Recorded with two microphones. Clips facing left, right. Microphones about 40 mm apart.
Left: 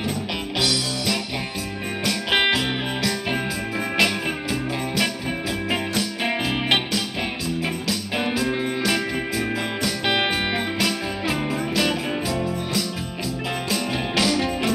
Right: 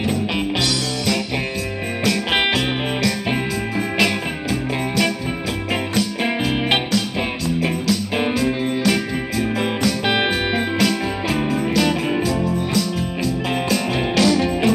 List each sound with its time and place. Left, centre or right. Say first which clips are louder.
0.6 s music: right 2 dB; centre
8.2 s music: right 3 dB; centre